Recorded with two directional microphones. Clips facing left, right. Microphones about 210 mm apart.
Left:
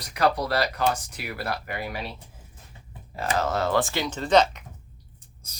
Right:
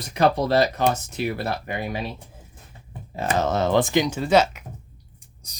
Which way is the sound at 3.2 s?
20° right (ahead or behind).